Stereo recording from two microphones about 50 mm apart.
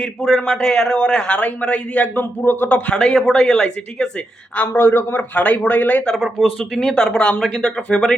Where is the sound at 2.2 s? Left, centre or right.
Left.